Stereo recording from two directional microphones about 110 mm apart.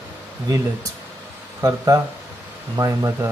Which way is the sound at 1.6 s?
35° right (ahead or behind).